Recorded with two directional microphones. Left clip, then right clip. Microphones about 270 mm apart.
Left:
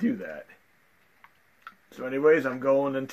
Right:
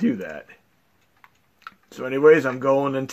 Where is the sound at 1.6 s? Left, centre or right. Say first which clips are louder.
Right 5 dB; right.